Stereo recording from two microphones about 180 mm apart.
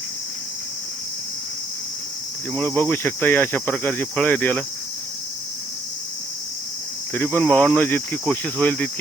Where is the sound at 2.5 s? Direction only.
10° left (ahead or behind).